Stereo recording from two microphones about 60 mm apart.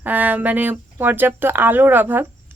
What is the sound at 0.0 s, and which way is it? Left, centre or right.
Speech, right.